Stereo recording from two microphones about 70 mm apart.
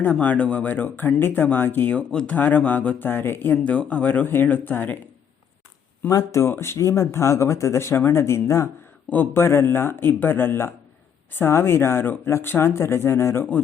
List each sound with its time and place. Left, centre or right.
0.0 s speech: left
1.9 s speech: centre
3.5 s speech: centre
6.1 s speech: left
6.5 s speech: left
9.0 s speech: left